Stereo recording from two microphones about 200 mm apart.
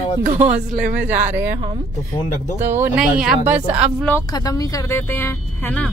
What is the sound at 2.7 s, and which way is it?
A woman's voice, 10° right (ahead or behind).